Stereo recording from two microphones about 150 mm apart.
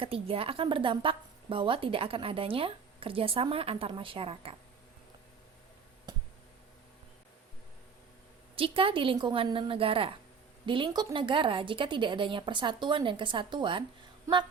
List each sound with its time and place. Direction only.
0.0 s a woman's voice: 40° right (ahead or behind)
6.1 s a sound: 25° right (ahead or behind)
8.5 s a woman's voice: 35° right (ahead or behind)